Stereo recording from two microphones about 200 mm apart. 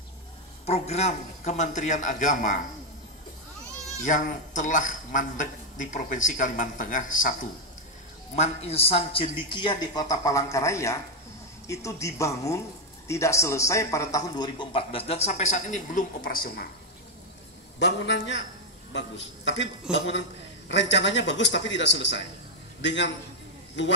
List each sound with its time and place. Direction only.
0.7 s a man's voice: 35° left (ahead or behind)
4.0 s a man's voice: 40° left (ahead or behind)
8.4 s a man's voice: 30° left (ahead or behind)
17.7 s a man's voice: 60° left (ahead or behind)